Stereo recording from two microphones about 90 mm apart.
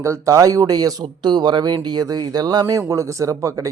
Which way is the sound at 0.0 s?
35° right (ahead or behind).